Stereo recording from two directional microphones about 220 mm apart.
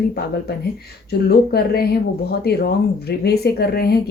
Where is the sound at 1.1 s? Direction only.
45° left (ahead or behind).